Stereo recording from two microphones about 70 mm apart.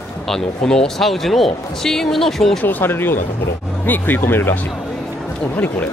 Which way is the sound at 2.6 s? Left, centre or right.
Left.